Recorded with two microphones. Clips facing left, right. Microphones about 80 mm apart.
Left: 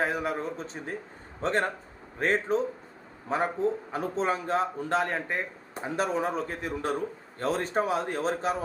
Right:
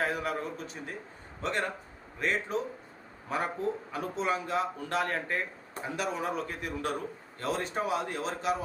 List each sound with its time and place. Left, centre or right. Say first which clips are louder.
0.0 s a man's voice: left 3 dB; left
3.2 s a man's voice: left 4 dB; left